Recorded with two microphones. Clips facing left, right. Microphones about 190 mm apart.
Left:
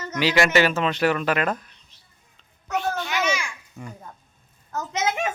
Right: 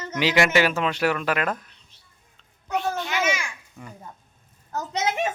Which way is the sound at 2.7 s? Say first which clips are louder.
Even; centre (ahead or behind).